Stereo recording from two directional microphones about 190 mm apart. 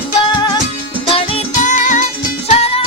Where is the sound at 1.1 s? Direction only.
35° left (ahead or behind).